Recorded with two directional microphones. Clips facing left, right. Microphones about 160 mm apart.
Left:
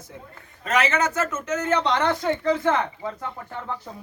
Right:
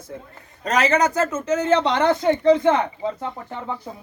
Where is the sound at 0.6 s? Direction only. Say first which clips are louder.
Right 4 dB; 40° right (ahead or behind); by 3.5 s 25° right (ahead or behind).